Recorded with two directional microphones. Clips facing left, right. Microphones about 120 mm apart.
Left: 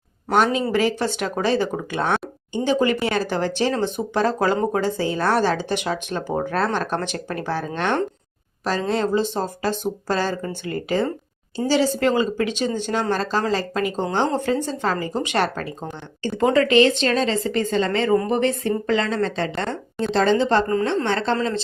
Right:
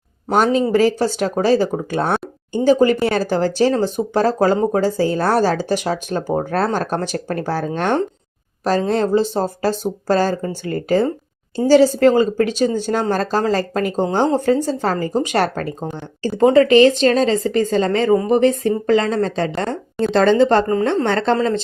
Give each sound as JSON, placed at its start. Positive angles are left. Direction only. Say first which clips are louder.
{"t": 0.3, "sound": "a woman's voice", "louder": "right 4 dB", "side_deg": -40}